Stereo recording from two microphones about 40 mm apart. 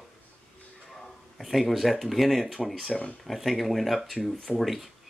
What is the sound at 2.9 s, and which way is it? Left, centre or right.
Speech, left.